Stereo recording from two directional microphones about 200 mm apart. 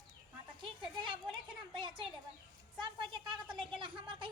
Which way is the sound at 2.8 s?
25° right (ahead or behind).